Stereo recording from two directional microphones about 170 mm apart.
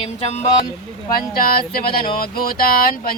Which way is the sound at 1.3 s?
60° left (ahead or behind).